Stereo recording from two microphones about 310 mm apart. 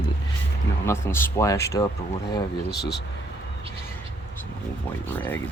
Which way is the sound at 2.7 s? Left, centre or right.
Left.